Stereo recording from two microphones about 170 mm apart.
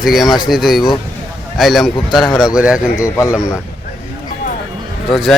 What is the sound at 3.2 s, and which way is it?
Speech, 15° left (ahead or behind).